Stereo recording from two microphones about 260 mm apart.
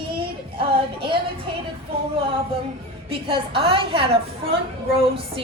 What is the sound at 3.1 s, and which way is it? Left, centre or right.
A woman's voice, right.